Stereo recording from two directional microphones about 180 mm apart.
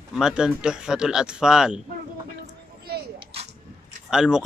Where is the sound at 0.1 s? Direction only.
5° right (ahead or behind).